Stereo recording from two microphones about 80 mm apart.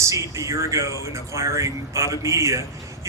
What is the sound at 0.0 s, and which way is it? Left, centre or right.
Speech, right.